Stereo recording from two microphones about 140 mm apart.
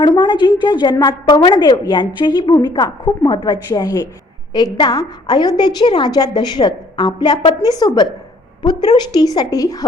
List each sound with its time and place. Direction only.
0.0 s a woman's voice: 35° left (ahead or behind)